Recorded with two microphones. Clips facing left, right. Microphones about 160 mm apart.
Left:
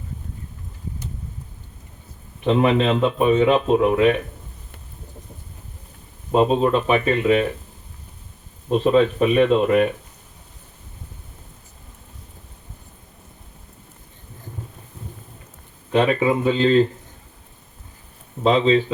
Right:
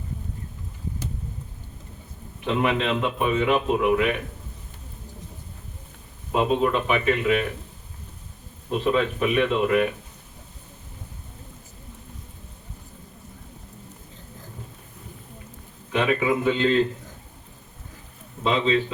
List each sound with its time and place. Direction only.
2.5 s speech: 30° left (ahead or behind)
6.3 s speech: 30° left (ahead or behind)
8.7 s speech: 30° left (ahead or behind)
15.9 s speech: 30° left (ahead or behind)
18.4 s speech: 35° left (ahead or behind)